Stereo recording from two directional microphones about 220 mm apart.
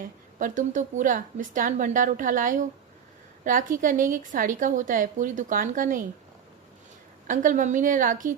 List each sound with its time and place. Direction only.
0.3 s a woman's voice: 35° right (ahead or behind)
7.3 s a woman's voice: 35° right (ahead or behind)